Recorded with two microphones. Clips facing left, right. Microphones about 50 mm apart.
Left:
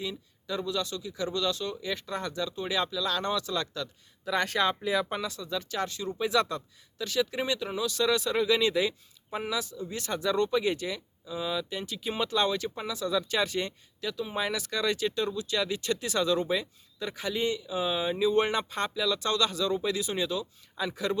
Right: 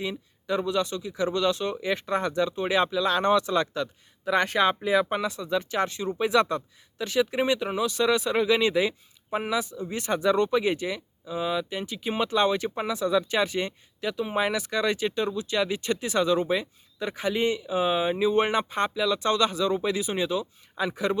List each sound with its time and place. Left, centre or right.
0.0 s speech: right